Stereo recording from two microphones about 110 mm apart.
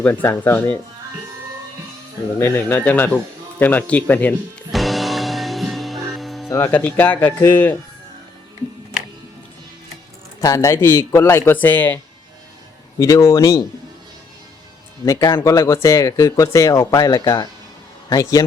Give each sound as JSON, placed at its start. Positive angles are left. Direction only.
{"t": 0.0, "sound": "speech", "side_deg": 20}
{"t": 2.4, "sound": "speech", "side_deg": 20}
{"t": 4.7, "sound": "music", "side_deg": 0}
{"t": 6.5, "sound": "speech", "side_deg": 20}
{"t": 10.4, "sound": "speech", "side_deg": 30}
{"t": 13.0, "sound": "speech", "side_deg": 30}
{"t": 15.0, "sound": "speech", "side_deg": 30}